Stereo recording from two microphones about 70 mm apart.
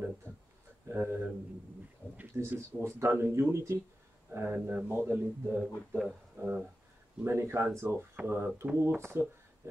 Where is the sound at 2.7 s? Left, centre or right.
Right.